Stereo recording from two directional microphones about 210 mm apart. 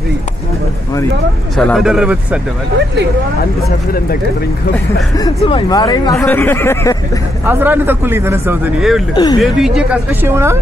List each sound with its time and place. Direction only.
1.6 s speech: centre (ahead or behind)
5.4 s speech: 25° left (ahead or behind)
7.4 s speech: 10° right (ahead or behind)
9.1 s speech: 20° left (ahead or behind)
9.4 s speech: 5° right (ahead or behind)